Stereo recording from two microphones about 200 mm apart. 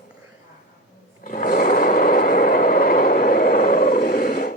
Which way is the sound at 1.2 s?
45° left (ahead or behind).